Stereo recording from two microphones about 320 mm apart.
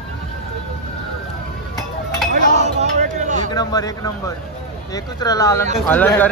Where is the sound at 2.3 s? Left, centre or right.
Right.